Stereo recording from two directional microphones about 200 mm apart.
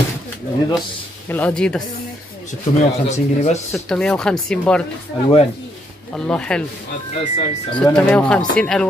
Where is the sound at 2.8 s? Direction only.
35° left (ahead or behind).